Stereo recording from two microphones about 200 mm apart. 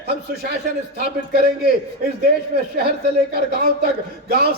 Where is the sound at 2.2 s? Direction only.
50° right (ahead or behind).